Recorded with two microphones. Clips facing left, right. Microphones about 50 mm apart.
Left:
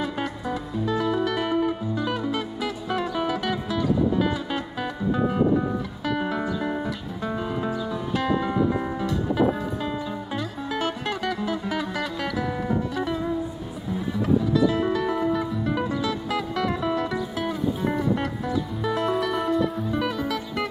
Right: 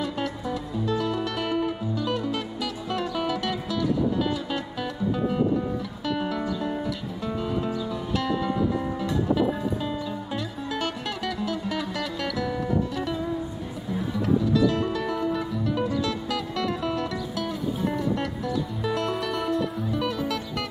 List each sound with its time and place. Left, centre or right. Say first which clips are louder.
0.0 s music: left 1 dB; centre
6.2 s music: left 1 dB; left
10.3 s music: left 3 dB; centre
14.7 s music: left 3 dB; centre